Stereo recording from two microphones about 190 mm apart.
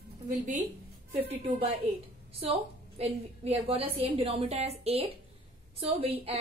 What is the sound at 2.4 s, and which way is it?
A woman's voice, 30° right (ahead or behind).